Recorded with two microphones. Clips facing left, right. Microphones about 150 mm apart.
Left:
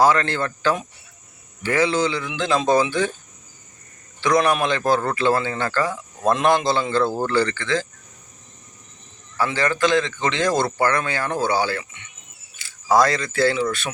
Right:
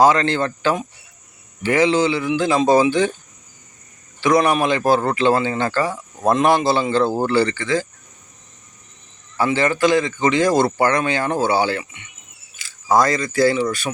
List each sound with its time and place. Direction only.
0.0 s speech: 20° right (ahead or behind)
4.2 s speech: 5° right (ahead or behind)
9.4 s speech: 15° right (ahead or behind)
10.8 s speech: 15° right (ahead or behind)
12.6 s camera: 90° right
12.9 s speech: centre (ahead or behind)